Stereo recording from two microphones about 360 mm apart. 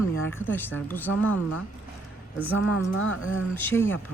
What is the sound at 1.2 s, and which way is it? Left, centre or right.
Speech, left.